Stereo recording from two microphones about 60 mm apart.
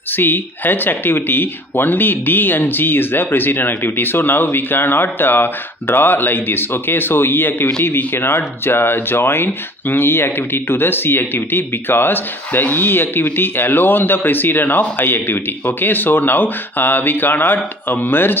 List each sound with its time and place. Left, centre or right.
0.1 s speech: left